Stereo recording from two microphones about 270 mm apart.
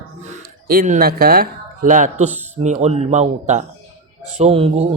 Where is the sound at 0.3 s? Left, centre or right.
Right.